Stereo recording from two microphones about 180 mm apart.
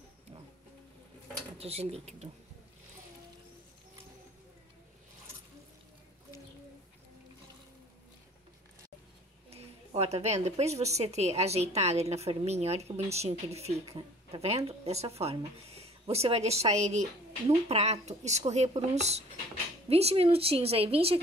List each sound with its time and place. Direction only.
1.6 s speech: 35° right (ahead or behind)
9.5 s speech: 35° right (ahead or behind)